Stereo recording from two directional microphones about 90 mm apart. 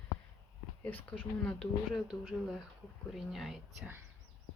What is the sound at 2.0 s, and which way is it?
Speech, 5° right (ahead or behind).